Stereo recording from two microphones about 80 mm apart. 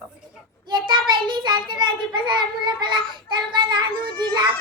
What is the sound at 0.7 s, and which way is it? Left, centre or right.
Child singing, right.